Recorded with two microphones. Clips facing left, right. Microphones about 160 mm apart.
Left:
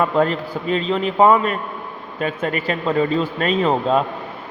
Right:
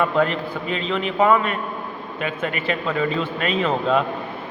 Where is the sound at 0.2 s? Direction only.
35° left (ahead or behind).